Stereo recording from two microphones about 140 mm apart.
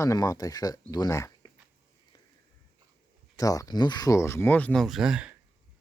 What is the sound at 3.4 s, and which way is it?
Speech, 25° left (ahead or behind).